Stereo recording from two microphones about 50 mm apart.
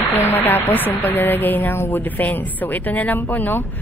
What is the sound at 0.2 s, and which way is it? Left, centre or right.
A woman's voice, left.